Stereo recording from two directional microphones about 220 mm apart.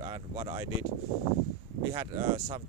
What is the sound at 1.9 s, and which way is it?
Speech, 20° right (ahead or behind).